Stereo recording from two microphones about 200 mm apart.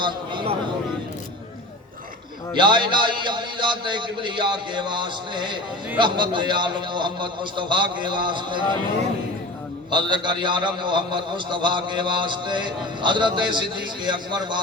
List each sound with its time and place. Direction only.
0.0 s a sound: 25° right (ahead or behind)
2.6 s a man's voice: 25° right (ahead or behind)
9.9 s a man's voice: 25° right (ahead or behind)